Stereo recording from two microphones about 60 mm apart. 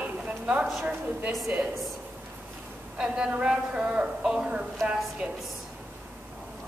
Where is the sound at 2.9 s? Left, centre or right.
Centre.